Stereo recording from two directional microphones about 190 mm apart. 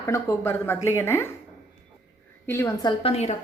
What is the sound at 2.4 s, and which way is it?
Speech, 15° left (ahead or behind).